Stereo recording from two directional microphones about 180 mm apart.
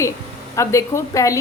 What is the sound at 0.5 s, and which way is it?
Speech, 15° left (ahead or behind).